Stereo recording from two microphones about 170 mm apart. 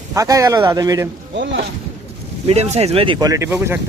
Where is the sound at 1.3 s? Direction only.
90° right.